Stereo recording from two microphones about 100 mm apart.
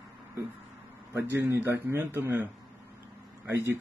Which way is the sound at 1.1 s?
25° right (ahead or behind).